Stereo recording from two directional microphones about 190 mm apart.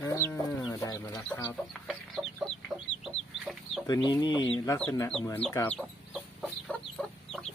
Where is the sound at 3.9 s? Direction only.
20° left (ahead or behind).